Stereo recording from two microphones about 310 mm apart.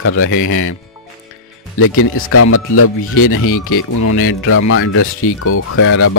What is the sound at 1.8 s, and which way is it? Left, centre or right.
Speech, left.